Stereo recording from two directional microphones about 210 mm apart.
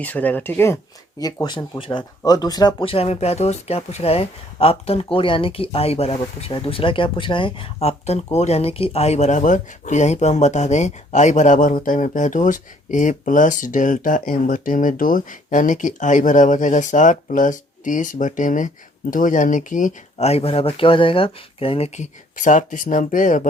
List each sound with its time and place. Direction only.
0.0 s speech: 10° left (ahead or behind); by 23.5 s 40° left (ahead or behind)